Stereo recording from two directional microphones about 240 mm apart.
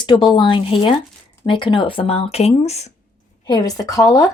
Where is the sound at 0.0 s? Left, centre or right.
Centre.